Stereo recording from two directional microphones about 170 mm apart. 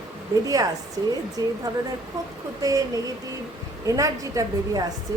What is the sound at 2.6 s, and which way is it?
A woman's voice, 20° right (ahead or behind).